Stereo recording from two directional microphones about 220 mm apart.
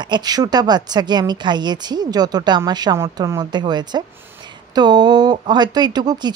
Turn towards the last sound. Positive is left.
turn(degrees=-20)  # may be behind; listen again after turning